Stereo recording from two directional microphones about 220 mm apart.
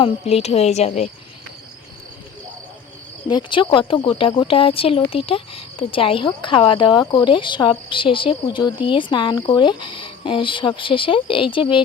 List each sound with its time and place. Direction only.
0.0 s speech: 25° left (ahead or behind)
3.2 s speech: 20° left (ahead or behind)